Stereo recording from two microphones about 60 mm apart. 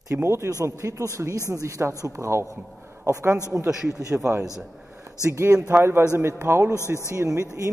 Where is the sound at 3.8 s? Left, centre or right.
Right.